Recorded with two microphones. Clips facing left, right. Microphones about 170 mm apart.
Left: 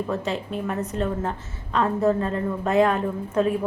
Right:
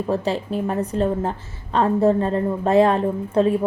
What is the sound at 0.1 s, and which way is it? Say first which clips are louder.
A woman's voice: right 5 dB; 35° right (ahead or behind).